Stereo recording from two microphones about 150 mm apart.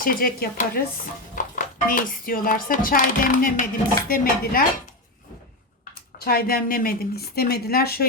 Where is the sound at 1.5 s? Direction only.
65° left (ahead or behind).